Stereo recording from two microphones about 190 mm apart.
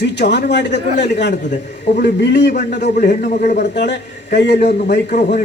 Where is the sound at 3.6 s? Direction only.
65° left (ahead or behind).